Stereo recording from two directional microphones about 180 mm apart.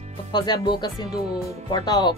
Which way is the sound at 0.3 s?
25° left (ahead or behind).